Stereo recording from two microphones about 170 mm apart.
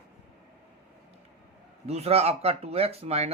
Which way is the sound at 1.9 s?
35° right (ahead or behind).